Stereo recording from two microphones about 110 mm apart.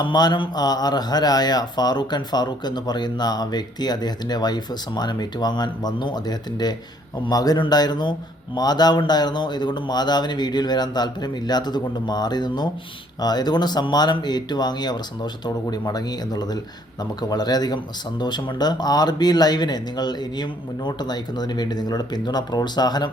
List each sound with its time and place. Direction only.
0.0 s speech: 40° left (ahead or behind)